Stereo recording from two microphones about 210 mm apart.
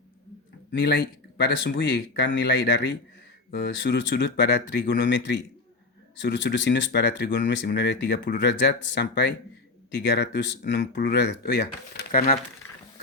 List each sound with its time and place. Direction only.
0.7 s speech: 50° left (ahead or behind)